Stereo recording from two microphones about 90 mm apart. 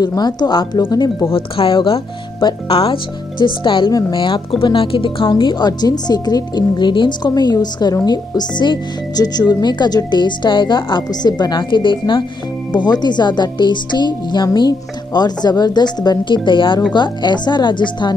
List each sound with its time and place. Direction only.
0.0 s speech: 50° left (ahead or behind)
1.3 s speech: 75° left (ahead or behind)
5.3 s speech: 55° left (ahead or behind)
7.2 s speech: 45° left (ahead or behind); by 12.3 s 65° left (ahead or behind)
12.7 s speech: 50° left (ahead or behind)